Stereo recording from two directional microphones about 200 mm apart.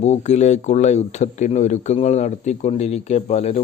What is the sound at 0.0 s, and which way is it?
Speech, 35° left (ahead or behind).